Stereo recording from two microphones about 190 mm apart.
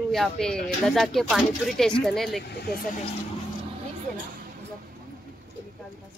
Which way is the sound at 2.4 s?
60° left (ahead or behind).